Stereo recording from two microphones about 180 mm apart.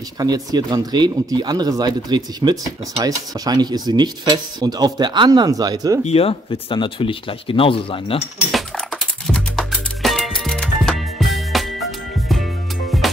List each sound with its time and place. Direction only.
0.2 s speech: 20° right (ahead or behind)
6.0 s speech: 30° left (ahead or behind)
8.5 s music: centre (ahead or behind)